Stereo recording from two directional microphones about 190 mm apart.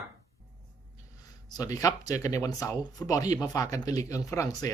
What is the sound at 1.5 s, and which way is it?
Speech, 20° left (ahead or behind).